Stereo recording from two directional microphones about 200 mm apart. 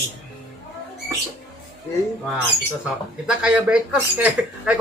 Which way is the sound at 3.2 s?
5° right (ahead or behind).